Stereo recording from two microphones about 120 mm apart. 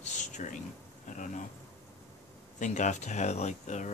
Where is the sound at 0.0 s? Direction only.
85° left.